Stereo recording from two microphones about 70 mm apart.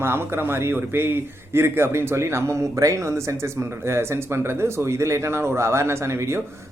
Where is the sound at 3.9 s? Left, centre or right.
Right.